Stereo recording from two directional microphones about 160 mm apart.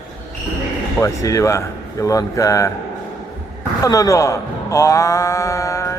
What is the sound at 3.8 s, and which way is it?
A man's voice, 20° left (ahead or behind).